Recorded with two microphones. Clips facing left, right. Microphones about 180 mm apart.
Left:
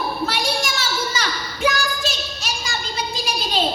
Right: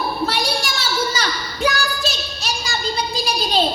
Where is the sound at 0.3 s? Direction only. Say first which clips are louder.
Right 1 dB; 35° right (ahead or behind).